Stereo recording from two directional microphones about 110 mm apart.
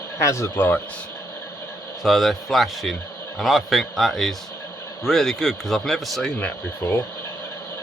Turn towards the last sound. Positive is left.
turn(degrees=20)  # may be behind; listen again after turning